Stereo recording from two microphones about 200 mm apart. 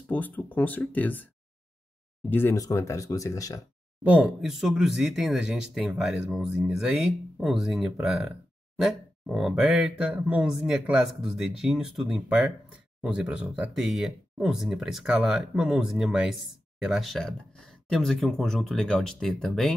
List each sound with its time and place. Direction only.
0.1 s speech: 10° left (ahead or behind)
4.0 s speech: 5° right (ahead or behind)